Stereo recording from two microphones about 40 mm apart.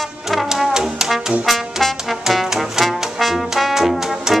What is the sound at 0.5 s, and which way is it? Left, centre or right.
Brass instrument, centre.